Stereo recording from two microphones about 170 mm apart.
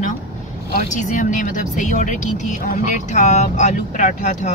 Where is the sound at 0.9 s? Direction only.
50° left (ahead or behind).